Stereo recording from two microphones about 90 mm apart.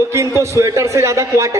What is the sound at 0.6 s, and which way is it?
A man's voice, 35° right (ahead or behind).